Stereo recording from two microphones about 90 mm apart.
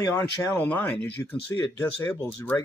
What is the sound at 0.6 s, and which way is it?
Speech, 20° left (ahead or behind).